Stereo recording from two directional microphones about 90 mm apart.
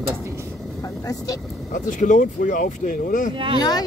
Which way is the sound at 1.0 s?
40° left (ahead or behind).